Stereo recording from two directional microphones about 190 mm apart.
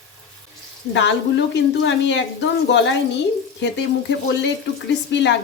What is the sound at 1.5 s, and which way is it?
Speech, 70° left (ahead or behind).